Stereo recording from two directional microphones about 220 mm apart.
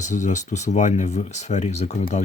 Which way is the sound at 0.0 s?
35° left (ahead or behind).